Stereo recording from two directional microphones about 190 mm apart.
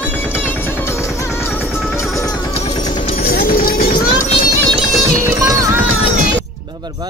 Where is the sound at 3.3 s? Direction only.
50° left (ahead or behind).